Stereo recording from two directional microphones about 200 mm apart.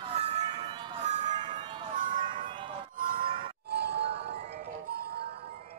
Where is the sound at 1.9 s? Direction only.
40° right (ahead or behind).